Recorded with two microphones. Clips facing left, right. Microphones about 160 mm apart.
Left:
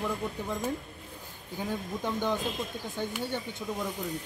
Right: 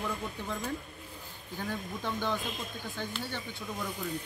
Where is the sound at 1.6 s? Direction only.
15° left (ahead or behind).